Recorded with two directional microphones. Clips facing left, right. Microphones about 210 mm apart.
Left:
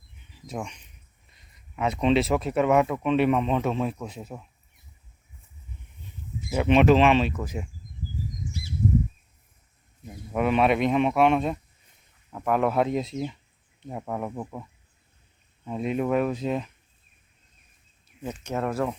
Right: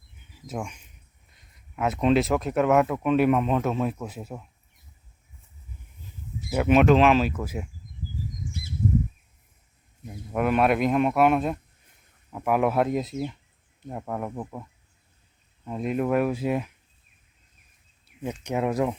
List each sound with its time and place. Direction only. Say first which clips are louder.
0.4 s speech: right 1 dB; 5° right (ahead or behind)
6.5 s speech: even; 5° right (ahead or behind)
10.1 s speech: even; centre (ahead or behind)
18.1 s a sound: right 3 dB; 70° right (ahead or behind)
18.4 s speech: right 2 dB; 15° right (ahead or behind)